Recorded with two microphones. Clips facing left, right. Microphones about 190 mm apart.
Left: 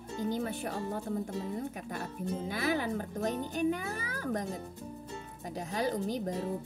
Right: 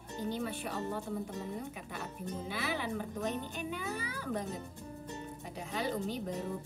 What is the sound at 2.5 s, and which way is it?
A woman's voice, 45° left (ahead or behind).